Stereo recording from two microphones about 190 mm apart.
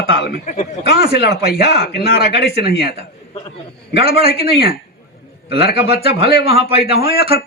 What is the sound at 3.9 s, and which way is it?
A man's voice, 30° right (ahead or behind).